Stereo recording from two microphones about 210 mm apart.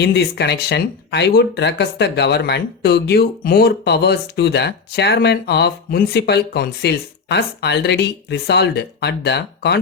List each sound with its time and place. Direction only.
0.0 s speech: 50° left (ahead or behind)